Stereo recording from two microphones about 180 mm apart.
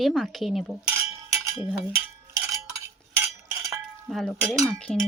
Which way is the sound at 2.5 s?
20° right (ahead or behind).